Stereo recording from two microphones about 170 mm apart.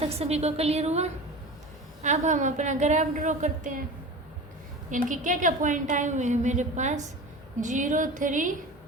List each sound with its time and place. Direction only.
0.0 s a woman's voice: 35° right (ahead or behind)
4.9 s a woman's voice: 50° right (ahead or behind)